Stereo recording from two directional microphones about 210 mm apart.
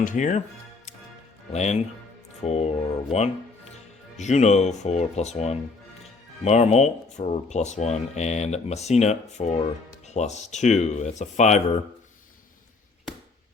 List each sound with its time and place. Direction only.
0.0 s speech: 35° left (ahead or behind)
1.5 s speech: 30° left (ahead or behind)